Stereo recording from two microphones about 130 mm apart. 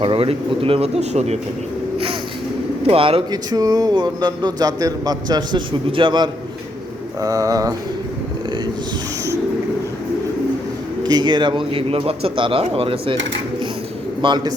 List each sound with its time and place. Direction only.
0.0 s speech: 45° right (ahead or behind)
2.8 s speech: 45° right (ahead or behind)
3.5 s a man's voice: 30° right (ahead or behind)
7.2 s bird: 25° right (ahead or behind)
11.0 s a man's voice: 35° right (ahead or behind)
14.2 s a man's voice: 35° right (ahead or behind)